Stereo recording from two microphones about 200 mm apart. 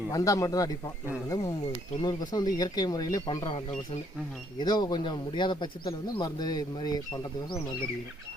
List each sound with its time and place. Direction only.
0.1 s a man's voice: 15° left (ahead or behind)